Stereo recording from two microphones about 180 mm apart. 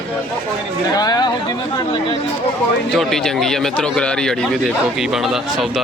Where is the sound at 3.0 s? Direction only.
Centre (ahead or behind).